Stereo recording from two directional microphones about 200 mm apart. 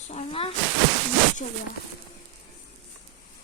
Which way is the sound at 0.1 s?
30° left (ahead or behind).